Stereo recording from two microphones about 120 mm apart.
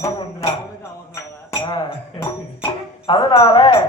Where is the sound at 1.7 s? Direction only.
40° left (ahead or behind).